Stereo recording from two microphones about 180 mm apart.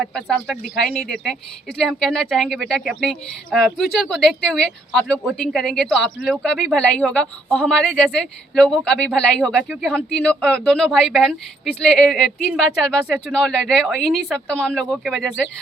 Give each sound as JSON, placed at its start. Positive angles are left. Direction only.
{"t": 0.1, "sound": "speech", "side_deg": 0}